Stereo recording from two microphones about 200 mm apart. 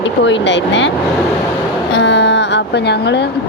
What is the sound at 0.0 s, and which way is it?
Speech, 65° left (ahead or behind).